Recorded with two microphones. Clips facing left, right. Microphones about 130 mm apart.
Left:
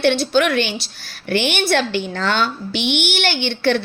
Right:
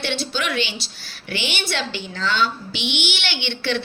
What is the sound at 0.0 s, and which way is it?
A woman's voice, 50° left (ahead or behind).